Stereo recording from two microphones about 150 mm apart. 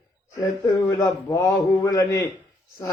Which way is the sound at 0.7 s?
25° left (ahead or behind).